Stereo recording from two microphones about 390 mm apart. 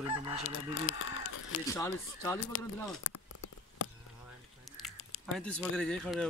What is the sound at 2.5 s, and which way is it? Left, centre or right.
Speech, left.